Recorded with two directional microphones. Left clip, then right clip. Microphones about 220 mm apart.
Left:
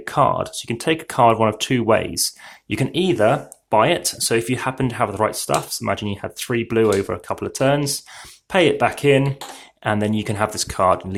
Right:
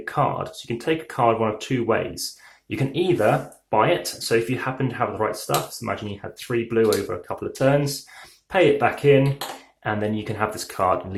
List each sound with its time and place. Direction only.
0.0 s speech: 40° left (ahead or behind)